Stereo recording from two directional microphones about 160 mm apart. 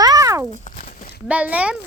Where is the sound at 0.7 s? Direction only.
60° left (ahead or behind).